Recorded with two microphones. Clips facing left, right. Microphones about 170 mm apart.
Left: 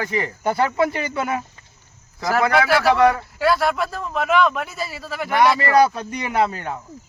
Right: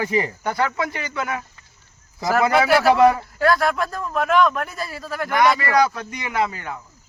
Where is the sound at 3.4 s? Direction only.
5° left (ahead or behind).